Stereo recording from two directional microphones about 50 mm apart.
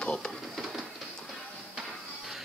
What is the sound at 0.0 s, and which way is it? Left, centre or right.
Speech, centre.